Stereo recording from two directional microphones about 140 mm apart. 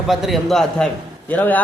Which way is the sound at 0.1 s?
Centre (ahead or behind).